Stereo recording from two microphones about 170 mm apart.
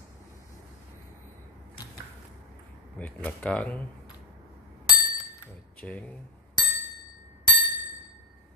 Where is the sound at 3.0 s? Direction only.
10° left (ahead or behind).